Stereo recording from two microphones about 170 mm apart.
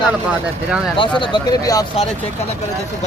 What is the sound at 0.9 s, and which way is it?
Speech, 30° left (ahead or behind).